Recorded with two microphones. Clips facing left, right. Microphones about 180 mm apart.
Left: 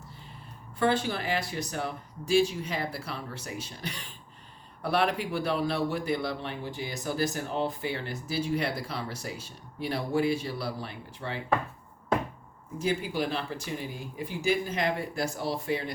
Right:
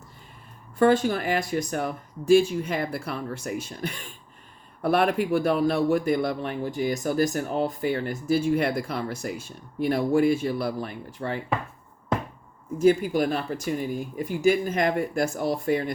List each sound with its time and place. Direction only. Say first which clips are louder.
0.8 s speech: right 7 dB; 45° right (ahead or behind)
12.8 s speech: right 9 dB; 50° right (ahead or behind)